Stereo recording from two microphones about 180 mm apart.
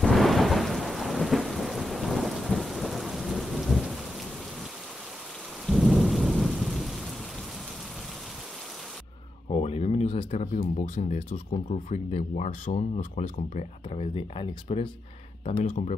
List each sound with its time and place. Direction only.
0.0 s thunder: centre (ahead or behind)
5.7 s thunder: centre (ahead or behind)
9.5 s a sound: 35° left (ahead or behind)
11.1 s speech: 40° left (ahead or behind)
15.4 s speech: 40° left (ahead or behind)